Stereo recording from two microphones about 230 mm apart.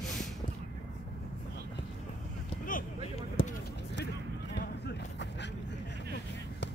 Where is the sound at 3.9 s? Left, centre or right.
Left.